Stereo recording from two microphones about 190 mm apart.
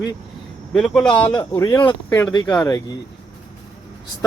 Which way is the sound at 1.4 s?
20° left (ahead or behind).